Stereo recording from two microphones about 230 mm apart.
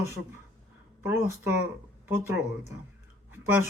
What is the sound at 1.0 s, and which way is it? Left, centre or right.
Speech, centre.